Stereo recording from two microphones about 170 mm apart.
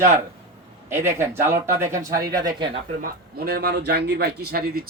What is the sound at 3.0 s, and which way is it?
A man's voice, 60° right (ahead or behind).